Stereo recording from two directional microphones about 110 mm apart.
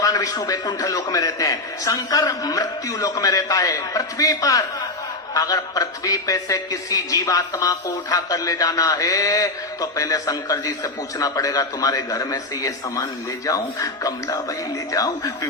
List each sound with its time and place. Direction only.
0.0 s a man's voice: 30° left (ahead or behind)